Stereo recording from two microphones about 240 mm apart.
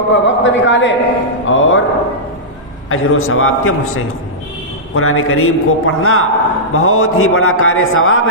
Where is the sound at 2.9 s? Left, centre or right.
Left.